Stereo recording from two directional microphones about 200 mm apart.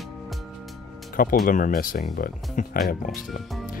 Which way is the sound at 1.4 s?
45° left (ahead or behind).